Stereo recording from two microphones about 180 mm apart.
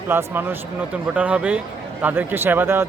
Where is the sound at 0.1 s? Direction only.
10° right (ahead or behind).